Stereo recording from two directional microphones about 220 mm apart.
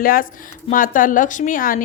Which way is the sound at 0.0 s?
40° left (ahead or behind).